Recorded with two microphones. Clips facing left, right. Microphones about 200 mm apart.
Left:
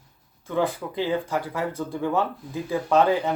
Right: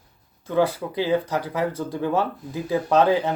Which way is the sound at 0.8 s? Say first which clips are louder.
Right 3 dB; 15° right (ahead or behind).